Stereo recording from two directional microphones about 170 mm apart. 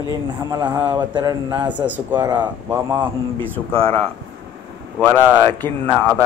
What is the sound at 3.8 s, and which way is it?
Speech, 35° right (ahead or behind).